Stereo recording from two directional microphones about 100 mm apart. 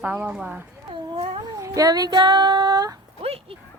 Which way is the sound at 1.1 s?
60° right (ahead or behind).